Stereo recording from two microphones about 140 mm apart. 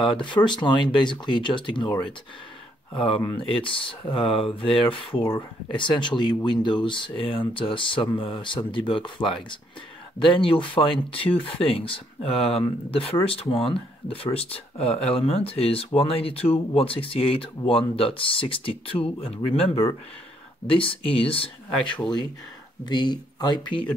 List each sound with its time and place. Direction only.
0.0 s speech: 35° left (ahead or behind)
2.9 s speech: 40° left (ahead or behind)
22.8 s speech: 30° left (ahead or behind)